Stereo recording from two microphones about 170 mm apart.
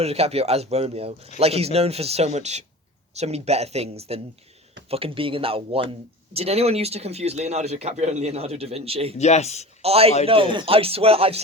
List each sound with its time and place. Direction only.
0.0 s a man's voice: 35° right (ahead or behind)
9.1 s speech: 40° left (ahead or behind)
9.8 s a man's voice: 35° right (ahead or behind)